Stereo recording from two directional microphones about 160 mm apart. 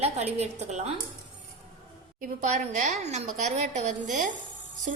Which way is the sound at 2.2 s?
50° right (ahead or behind).